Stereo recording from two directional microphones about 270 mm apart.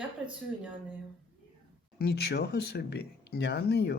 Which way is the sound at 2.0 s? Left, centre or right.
Left.